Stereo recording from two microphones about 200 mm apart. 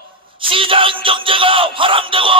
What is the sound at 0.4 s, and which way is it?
A man's voice, 25° right (ahead or behind).